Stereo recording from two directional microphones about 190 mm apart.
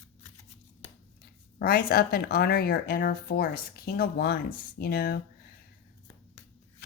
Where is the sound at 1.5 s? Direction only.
55° left (ahead or behind).